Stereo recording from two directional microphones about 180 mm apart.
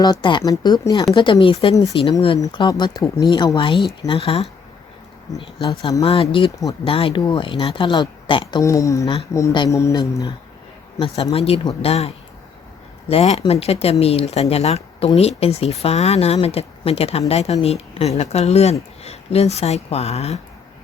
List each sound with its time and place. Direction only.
0.0 s speech: 25° left (ahead or behind)
10.9 s speech: 30° left (ahead or behind)